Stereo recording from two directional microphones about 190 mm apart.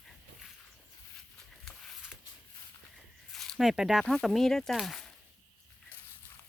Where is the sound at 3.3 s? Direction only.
Centre (ahead or behind).